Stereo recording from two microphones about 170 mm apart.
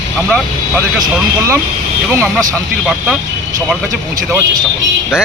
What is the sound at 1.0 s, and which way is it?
Speech, 15° right (ahead or behind).